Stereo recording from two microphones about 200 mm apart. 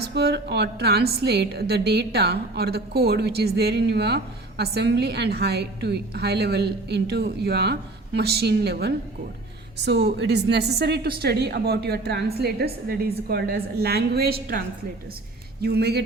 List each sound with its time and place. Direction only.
0.0 s a woman's voice: 55° right (ahead or behind)
15.6 s a woman's voice: 55° right (ahead or behind)